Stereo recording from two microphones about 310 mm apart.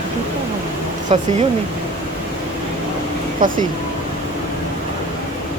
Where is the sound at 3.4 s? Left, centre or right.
Right.